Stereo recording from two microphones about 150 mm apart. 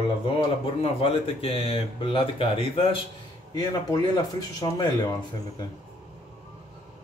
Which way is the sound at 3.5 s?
25° left (ahead or behind).